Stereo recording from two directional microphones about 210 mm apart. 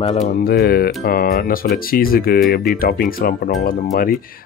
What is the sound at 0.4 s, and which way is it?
Speech, 45° left (ahead or behind).